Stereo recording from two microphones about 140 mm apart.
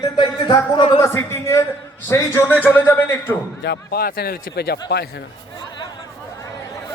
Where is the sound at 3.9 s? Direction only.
90° left.